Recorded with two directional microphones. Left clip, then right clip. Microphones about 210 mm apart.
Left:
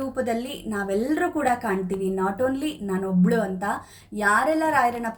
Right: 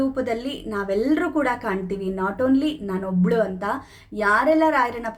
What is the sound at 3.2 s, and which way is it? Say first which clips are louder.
A woman's voice: right 4 dB; 20° right (ahead or behind).